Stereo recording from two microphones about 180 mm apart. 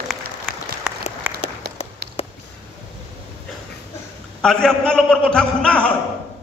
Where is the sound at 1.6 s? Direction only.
65° right (ahead or behind).